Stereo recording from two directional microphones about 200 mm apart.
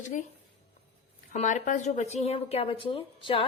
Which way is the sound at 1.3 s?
40° left (ahead or behind).